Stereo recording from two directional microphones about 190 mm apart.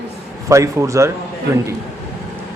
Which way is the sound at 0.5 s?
15° right (ahead or behind).